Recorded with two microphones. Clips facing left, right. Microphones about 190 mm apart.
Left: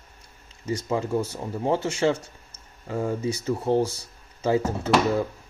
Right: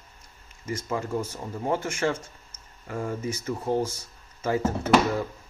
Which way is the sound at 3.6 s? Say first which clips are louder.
Left 3 dB; 30° left (ahead or behind).